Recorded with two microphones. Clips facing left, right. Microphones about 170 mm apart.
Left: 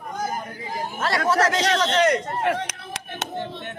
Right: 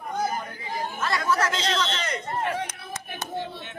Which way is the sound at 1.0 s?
75° left (ahead or behind).